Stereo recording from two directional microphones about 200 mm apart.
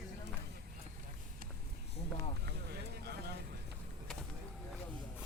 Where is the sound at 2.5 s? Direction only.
55° right (ahead or behind).